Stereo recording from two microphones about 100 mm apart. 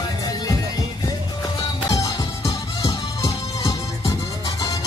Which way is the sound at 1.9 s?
35° left (ahead or behind).